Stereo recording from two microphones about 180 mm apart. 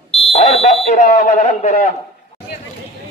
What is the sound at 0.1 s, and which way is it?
Fire alarm, 35° left (ahead or behind).